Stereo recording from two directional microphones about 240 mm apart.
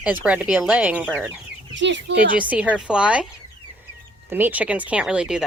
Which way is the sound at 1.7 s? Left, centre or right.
Right.